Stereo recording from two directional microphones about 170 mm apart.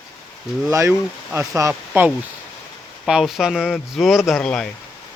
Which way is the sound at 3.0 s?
Centre (ahead or behind).